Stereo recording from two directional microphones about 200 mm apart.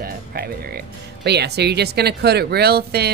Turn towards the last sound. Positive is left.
turn(degrees=-55)  # may be behind; listen again after turning